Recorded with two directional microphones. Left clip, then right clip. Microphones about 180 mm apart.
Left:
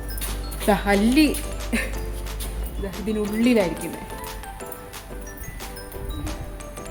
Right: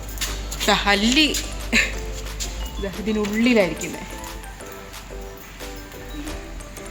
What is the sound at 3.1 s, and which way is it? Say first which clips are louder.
Speech: right 1 dB; 25° right (ahead or behind).